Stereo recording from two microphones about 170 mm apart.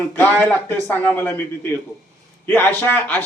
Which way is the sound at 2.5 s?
10° left (ahead or behind).